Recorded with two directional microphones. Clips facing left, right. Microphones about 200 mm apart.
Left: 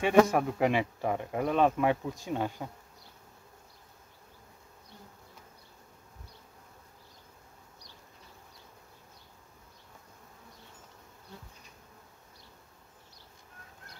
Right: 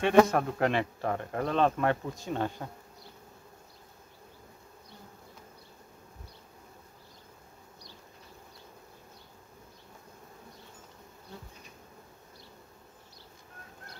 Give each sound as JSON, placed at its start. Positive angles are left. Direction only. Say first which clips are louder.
{"t": 0.0, "sound": "speech", "louder": "right 1 dB", "side_deg": 10}